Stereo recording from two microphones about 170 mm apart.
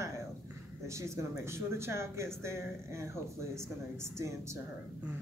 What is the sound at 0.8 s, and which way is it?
Speech, 15° right (ahead or behind).